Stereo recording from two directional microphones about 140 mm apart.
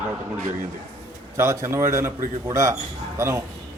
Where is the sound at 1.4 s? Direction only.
20° right (ahead or behind).